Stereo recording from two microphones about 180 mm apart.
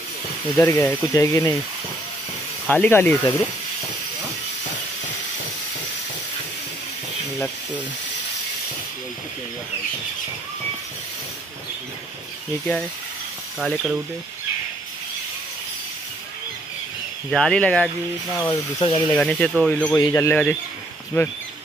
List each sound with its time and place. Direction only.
0.6 s speech: 10° left (ahead or behind)
2.7 s speech: 10° left (ahead or behind)
13.6 s speech: centre (ahead or behind)
17.3 s speech: 5° left (ahead or behind)
18.5 s speech: 25° left (ahead or behind)
19.1 s speech: 5° left (ahead or behind)
20.0 s speech: 20° left (ahead or behind)